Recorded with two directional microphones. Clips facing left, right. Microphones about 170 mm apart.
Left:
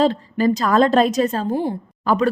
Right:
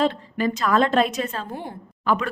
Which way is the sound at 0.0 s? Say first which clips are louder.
Left 5 dB; 35° left (ahead or behind).